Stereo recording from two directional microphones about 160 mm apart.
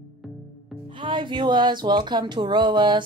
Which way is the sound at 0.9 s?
30° right (ahead or behind).